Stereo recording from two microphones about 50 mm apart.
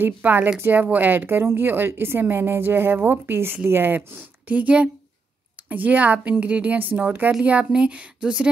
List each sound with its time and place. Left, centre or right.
0.0 s a woman's voice: right
4.5 s a woman's voice: right
7.4 s speech: right